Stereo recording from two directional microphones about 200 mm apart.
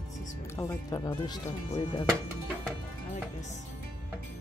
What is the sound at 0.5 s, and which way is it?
Speech, 15° left (ahead or behind).